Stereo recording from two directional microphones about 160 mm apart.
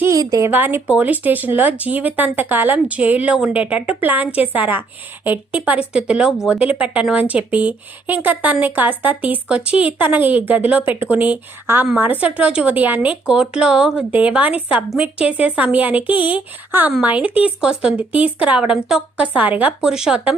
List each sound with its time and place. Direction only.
0.0 s speech: 20° right (ahead or behind); by 20.3 s 5° right (ahead or behind)